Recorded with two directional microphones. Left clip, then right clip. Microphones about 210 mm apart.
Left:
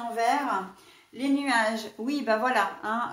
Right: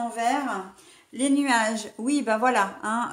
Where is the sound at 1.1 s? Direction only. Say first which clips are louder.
Right 3 dB; 45° right (ahead or behind).